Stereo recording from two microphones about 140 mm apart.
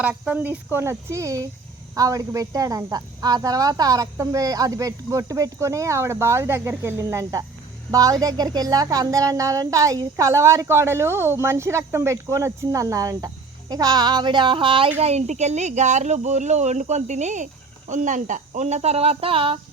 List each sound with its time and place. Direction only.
0.0 s speech: 10° right (ahead or behind); by 14.8 s 35° right (ahead or behind)
15.0 s speech: 50° right (ahead or behind)